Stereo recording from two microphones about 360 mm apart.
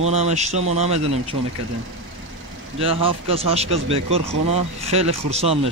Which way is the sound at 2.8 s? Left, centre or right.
Centre.